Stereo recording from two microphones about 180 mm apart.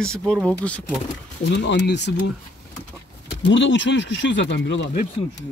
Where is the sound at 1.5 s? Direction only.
75° left (ahead or behind).